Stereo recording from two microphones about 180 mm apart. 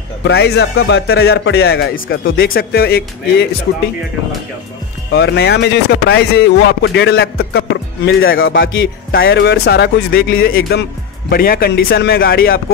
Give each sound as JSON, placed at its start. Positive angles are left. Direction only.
{"t": 0.2, "sound": "speech", "side_deg": 65}
{"t": 2.3, "sound": "speech", "side_deg": 55}
{"t": 5.1, "sound": "speech", "side_deg": 65}
{"t": 8.3, "sound": "speech", "side_deg": 65}